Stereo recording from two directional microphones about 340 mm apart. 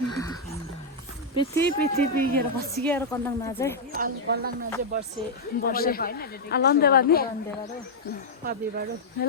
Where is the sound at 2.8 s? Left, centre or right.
Centre.